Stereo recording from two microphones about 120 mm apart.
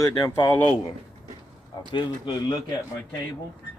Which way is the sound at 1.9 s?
40° left (ahead or behind).